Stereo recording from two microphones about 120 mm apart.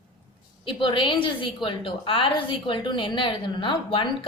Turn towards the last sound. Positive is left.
turn(degrees=45)  # may be behind; listen again after turning